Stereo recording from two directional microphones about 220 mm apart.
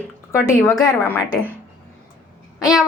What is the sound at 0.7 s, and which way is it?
Speech, 10° left (ahead or behind).